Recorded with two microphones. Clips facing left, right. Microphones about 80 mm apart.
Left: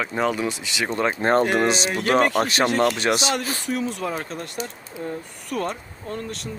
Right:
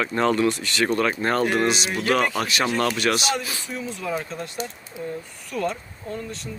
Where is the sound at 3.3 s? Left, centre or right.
Left.